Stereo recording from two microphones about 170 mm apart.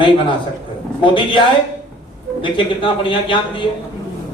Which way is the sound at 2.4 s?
30° left (ahead or behind).